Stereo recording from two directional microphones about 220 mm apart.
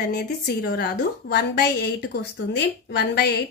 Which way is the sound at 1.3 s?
50° left (ahead or behind).